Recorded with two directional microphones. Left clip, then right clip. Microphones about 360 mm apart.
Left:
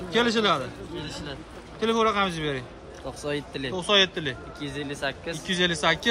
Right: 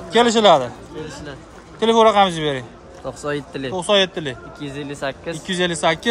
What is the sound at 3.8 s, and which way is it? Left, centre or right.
Speech, centre.